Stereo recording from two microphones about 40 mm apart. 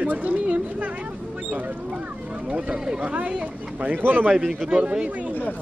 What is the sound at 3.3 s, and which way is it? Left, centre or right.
Speech, right.